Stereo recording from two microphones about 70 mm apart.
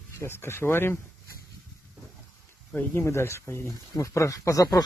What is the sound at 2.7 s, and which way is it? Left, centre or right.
Speech, left.